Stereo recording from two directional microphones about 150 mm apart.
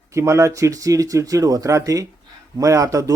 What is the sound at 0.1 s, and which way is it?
Speech, 20° right (ahead or behind).